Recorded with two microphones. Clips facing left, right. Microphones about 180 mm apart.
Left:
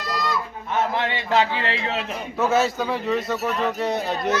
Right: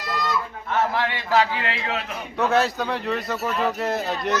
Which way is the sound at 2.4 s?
Centre (ahead or behind).